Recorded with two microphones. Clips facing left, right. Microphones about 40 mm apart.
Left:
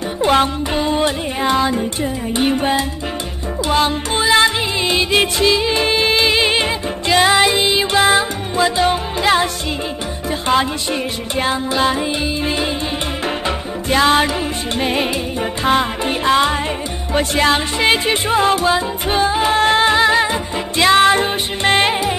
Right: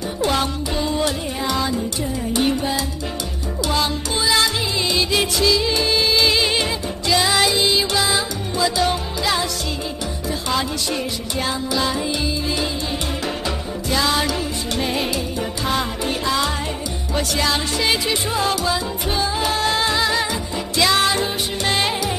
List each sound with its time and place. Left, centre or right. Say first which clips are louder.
0.2 s music: left 7 dB; left
10.5 s music: left 6 dB; left
13.8 s music: left 6 dB; left